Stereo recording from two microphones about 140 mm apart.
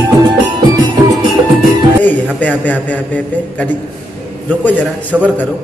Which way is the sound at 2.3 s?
10° left (ahead or behind).